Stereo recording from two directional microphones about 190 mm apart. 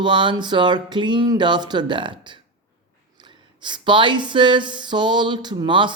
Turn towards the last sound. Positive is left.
turn(degrees=-25)  # may be behind; listen again after turning